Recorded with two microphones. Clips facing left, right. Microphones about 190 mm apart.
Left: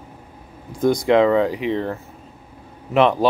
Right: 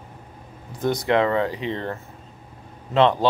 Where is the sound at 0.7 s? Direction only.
10° left (ahead or behind).